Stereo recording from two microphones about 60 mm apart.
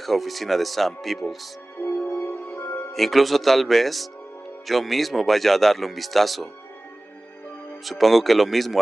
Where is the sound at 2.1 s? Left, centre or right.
Left.